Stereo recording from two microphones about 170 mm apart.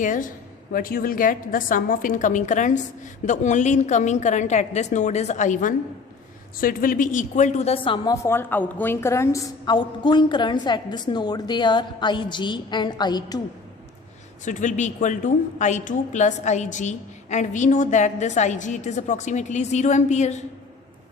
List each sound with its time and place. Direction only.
0.0 s a woman's voice: 50° left (ahead or behind)
8.0 s a woman's voice: 15° left (ahead or behind)
14.4 s a woman's voice: 45° left (ahead or behind)